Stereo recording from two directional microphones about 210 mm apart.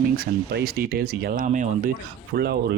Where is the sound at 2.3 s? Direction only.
50° right (ahead or behind).